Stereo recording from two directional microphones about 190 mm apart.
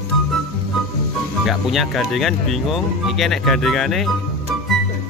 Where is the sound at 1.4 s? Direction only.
Centre (ahead or behind).